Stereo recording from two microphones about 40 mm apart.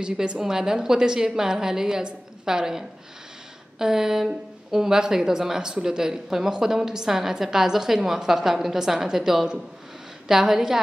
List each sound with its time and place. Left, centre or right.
0.0 s a woman's voice: right